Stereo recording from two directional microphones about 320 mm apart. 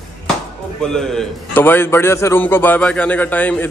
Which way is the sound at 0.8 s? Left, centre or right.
Centre.